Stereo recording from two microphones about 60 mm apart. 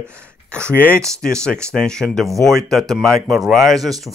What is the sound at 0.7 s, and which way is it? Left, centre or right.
Speech, left.